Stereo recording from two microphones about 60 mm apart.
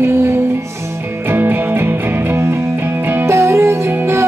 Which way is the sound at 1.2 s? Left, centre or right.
Right.